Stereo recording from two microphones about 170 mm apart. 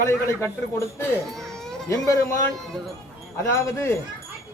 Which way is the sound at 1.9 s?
20° left (ahead or behind).